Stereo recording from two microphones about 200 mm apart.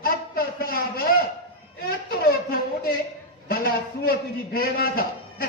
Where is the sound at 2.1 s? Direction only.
45° left (ahead or behind).